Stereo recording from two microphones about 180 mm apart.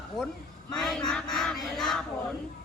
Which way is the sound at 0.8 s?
5° left (ahead or behind).